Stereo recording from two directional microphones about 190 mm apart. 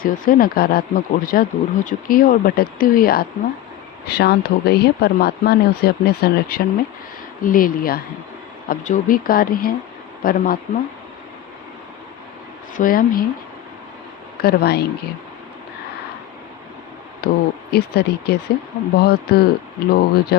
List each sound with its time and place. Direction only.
0.0 s speech: 50° left (ahead or behind)
12.7 s speech: 45° left (ahead or behind)
14.3 s speech: 55° left (ahead or behind)
17.2 s speech: 55° left (ahead or behind)